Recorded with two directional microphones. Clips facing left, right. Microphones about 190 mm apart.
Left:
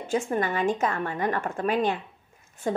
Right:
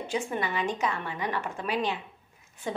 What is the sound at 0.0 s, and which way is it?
A woman's voice, 45° left (ahead or behind).